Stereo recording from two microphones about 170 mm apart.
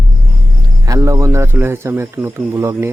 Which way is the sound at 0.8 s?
20° right (ahead or behind).